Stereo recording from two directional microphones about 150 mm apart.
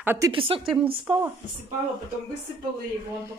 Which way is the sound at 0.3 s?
35° right (ahead or behind).